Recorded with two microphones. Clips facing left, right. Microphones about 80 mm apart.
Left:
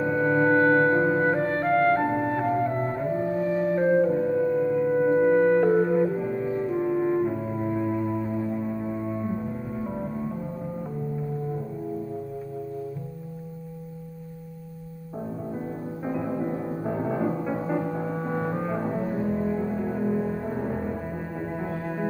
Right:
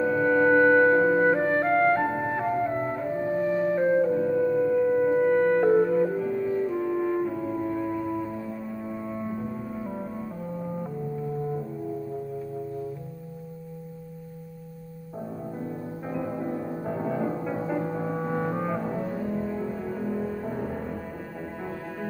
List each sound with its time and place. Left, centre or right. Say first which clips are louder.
0.0 s music: right 1 dB; centre
6.1 s music: right 1 dB; left
7.2 s french horn: left 1 dB; centre
7.8 s music: left 2 dB; centre
16.1 s music: left 2 dB; centre
19.1 s cello: left 3 dB; left
19.4 s music: left 4 dB; centre